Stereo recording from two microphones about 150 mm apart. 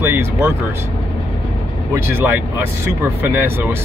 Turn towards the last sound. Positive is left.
turn(degrees=-15)  # may be behind; listen again after turning